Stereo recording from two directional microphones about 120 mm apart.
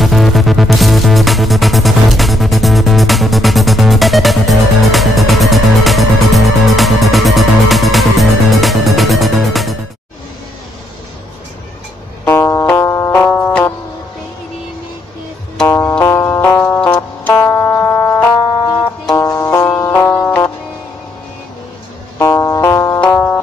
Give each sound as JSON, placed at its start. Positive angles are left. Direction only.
{"t": 0.0, "sound": "music", "side_deg": 0}
{"t": 12.3, "sound": "music", "side_deg": 20}
{"t": 15.6, "sound": "music", "side_deg": 20}
{"t": 17.3, "sound": "music", "side_deg": 25}
{"t": 22.2, "sound": "music", "side_deg": 25}